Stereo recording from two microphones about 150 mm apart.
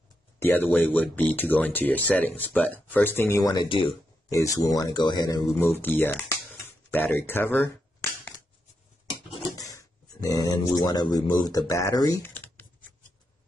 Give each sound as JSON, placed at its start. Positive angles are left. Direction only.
{"t": 0.4, "sound": "speech", "side_deg": 15}
{"t": 3.6, "sound": "speech", "side_deg": 35}
{"t": 5.7, "sound": "speech", "side_deg": 15}
{"t": 6.6, "sound": "a sound", "side_deg": 15}
{"t": 9.6, "sound": "speech", "side_deg": 25}
{"t": 12.2, "sound": "computer keyboard", "side_deg": 15}